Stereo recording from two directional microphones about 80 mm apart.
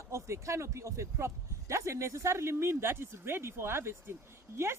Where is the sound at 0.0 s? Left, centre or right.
Right.